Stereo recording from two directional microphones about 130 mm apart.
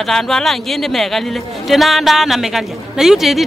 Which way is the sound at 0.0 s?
Centre (ahead or behind).